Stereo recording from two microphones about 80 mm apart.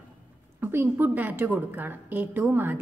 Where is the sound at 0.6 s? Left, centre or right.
Right.